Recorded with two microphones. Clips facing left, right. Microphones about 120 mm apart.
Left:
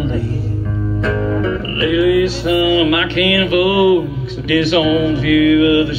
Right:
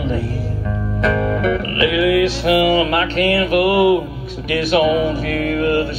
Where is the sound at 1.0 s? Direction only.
90° right; by 2.6 s 70° right (ahead or behind).